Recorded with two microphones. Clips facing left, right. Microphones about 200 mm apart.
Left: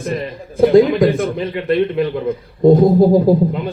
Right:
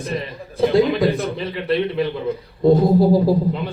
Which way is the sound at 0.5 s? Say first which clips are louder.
Left 6 dB; 50° left (ahead or behind).